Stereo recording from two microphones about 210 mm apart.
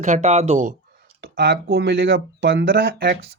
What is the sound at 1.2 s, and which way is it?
Speech, 50° right (ahead or behind).